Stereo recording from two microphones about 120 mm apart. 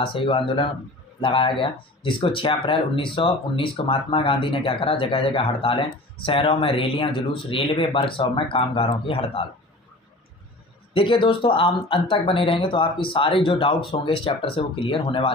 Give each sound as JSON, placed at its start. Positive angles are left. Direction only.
{"t": 0.0, "sound": "speech", "side_deg": 45}
{"t": 11.0, "sound": "speech", "side_deg": 45}